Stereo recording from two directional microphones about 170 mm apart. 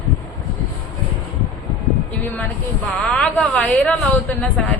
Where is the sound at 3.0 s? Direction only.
5° left (ahead or behind).